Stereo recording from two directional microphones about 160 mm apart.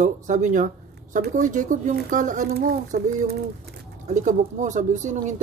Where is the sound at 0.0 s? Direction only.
50° right (ahead or behind); by 3.3 s 75° right (ahead or behind).